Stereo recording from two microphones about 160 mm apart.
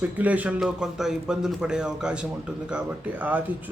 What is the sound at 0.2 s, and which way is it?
A man's voice, 10° right (ahead or behind).